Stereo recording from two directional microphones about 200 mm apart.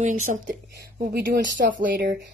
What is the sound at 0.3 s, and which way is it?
Speech, 50° right (ahead or behind).